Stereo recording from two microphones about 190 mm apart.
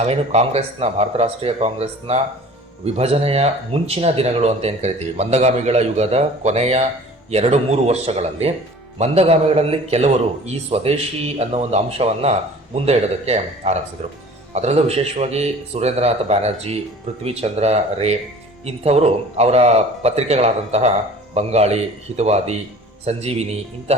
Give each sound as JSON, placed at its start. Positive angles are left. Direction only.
{"t": 0.0, "sound": "speech", "side_deg": -35}